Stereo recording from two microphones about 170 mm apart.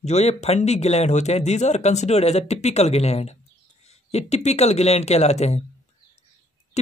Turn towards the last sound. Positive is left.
turn(degrees=40)  # may be behind; listen again after turning